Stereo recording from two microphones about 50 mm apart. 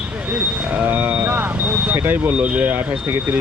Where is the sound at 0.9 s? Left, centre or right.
Right.